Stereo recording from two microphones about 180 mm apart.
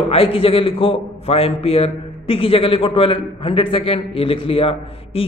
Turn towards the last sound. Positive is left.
turn(degrees=30)  # may be behind; listen again after turning